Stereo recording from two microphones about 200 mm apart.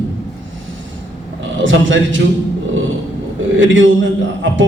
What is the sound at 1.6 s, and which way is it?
Speech, 75° right (ahead or behind).